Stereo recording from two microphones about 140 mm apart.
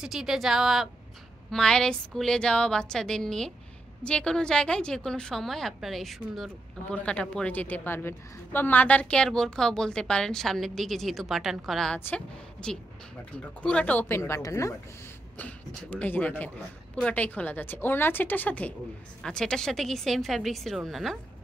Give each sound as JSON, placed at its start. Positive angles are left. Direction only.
{"t": 0.0, "sound": "a woman's voice", "side_deg": -5}
{"t": 15.3, "sound": "a woman's voice", "side_deg": 10}